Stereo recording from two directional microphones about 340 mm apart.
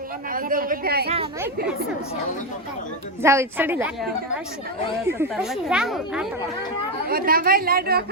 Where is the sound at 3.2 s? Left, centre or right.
Centre.